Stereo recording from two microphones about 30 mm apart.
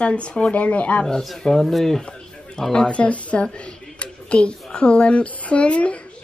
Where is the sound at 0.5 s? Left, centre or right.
Left.